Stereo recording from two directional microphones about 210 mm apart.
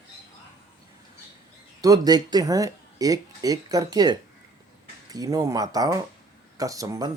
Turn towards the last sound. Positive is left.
turn(degrees=-15)  # may be behind; listen again after turning